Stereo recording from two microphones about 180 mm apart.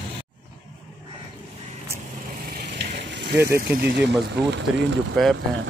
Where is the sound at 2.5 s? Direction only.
70° right (ahead or behind).